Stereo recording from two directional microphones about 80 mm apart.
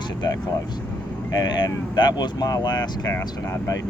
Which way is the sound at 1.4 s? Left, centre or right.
Left.